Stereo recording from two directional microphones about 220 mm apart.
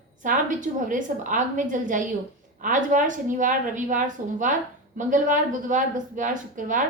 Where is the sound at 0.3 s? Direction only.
35° right (ahead or behind).